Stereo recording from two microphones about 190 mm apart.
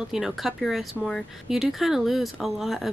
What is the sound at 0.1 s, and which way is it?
Speech, centre (ahead or behind).